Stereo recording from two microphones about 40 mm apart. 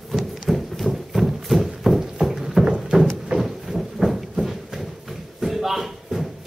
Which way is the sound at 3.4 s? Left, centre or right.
Centre.